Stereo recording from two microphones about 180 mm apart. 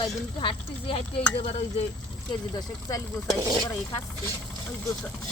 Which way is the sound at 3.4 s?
20° right (ahead or behind).